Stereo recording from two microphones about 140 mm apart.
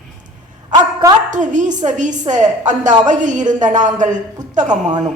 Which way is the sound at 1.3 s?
65° right (ahead or behind).